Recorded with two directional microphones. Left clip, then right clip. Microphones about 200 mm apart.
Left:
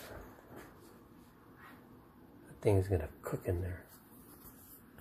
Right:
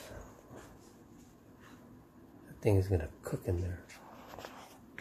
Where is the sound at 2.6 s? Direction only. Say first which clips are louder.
Even; 25° right (ahead or behind).